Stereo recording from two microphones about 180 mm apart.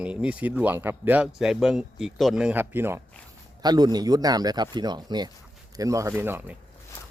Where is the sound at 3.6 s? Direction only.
20° right (ahead or behind).